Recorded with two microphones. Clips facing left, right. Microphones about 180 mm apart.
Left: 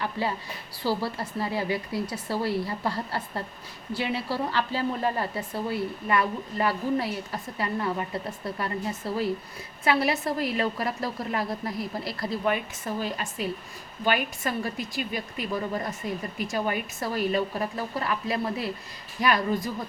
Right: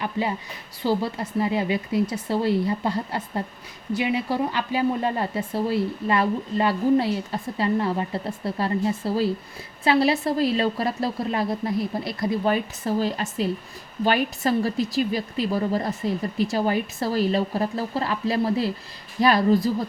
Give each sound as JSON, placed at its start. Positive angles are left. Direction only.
{"t": 0.0, "sound": "a woman's voice", "side_deg": -20}
{"t": 12.5, "sound": "speech", "side_deg": -35}